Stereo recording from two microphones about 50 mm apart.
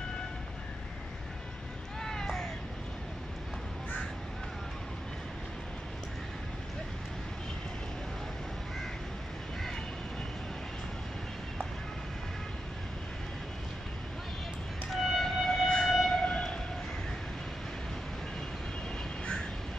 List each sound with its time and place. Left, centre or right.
2.0 s a sound: centre
14.9 s music: centre
15.9 s train: centre
16.2 s train: centre